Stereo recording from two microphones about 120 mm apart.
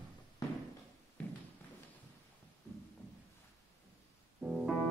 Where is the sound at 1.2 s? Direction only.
10° left (ahead or behind).